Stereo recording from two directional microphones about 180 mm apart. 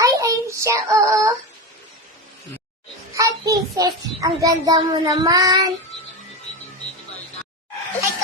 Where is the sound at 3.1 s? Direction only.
20° right (ahead or behind).